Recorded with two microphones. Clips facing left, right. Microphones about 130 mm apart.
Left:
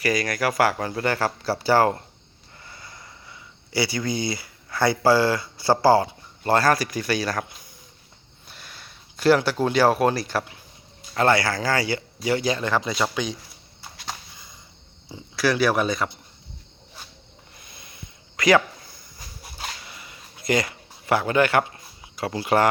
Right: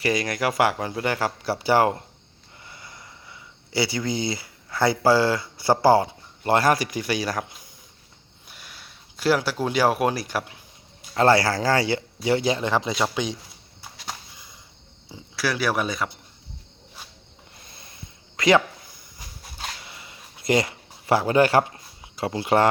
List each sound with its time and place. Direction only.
0.0 s speech: 25° right (ahead or behind)
8.4 s speech: 10° right (ahead or behind)
11.3 s speech: 35° right (ahead or behind)
13.9 s a sound: 5° right (ahead or behind)
15.1 s speech: 5° right (ahead or behind)
17.6 s a sound: 35° right (ahead or behind)